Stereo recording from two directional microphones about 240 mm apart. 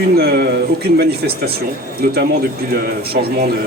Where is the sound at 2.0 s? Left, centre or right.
Right.